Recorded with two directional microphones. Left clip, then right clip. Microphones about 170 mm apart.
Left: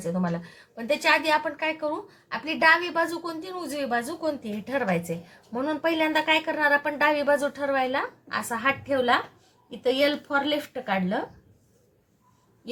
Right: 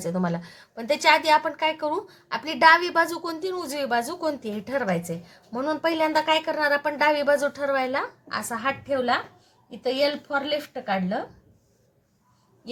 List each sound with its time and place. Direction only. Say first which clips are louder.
0.0 s a woman's voice: right 2 dB; 30° right (ahead or behind)
4.7 s speech: even; 10° right (ahead or behind)
5.6 s speech: right 1 dB; 15° right (ahead or behind)
9.0 s speech: left 1 dB; 5° left (ahead or behind)